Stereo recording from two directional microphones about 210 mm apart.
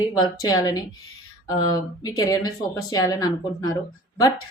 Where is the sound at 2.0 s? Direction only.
15° left (ahead or behind).